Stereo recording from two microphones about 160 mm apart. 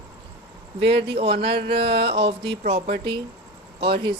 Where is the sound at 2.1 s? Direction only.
35° right (ahead or behind).